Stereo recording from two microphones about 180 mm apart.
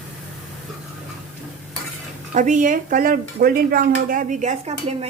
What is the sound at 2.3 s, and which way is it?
A woman's voice, 45° right (ahead or behind).